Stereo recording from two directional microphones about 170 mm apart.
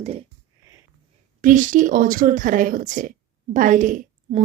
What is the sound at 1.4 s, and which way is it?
A woman's voice, 50° right (ahead or behind).